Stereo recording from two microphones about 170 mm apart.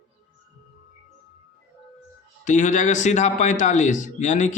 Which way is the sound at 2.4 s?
45° left (ahead or behind).